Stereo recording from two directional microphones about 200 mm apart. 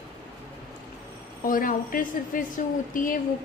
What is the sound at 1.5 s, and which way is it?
Speech, 45° left (ahead or behind).